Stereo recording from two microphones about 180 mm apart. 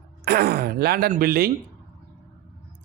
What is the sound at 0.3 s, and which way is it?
Speech, 60° right (ahead or behind).